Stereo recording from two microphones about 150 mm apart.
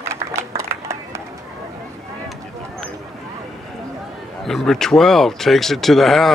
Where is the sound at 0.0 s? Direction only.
15° right (ahead or behind).